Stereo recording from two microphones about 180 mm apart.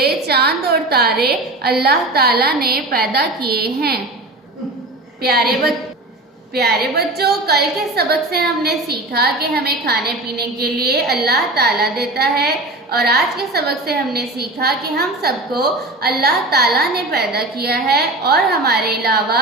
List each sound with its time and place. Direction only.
0.0 s a sound: 60° right (ahead or behind)
1.6 s a woman's voice: 60° right (ahead or behind)
5.2 s a woman's voice: 60° right (ahead or behind)